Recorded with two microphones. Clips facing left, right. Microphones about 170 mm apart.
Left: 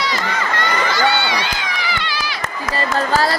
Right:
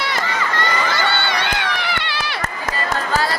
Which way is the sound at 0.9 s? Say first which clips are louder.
Left 3 dB; 55° right (ahead or behind).